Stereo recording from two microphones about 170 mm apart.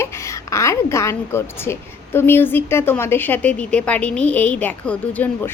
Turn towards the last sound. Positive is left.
turn(degrees=10)  # may be behind; listen again after turning